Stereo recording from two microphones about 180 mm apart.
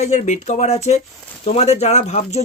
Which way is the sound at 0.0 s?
40° left (ahead or behind).